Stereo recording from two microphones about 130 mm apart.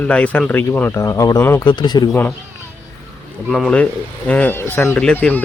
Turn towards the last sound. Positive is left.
turn(degrees=10)  # may be behind; listen again after turning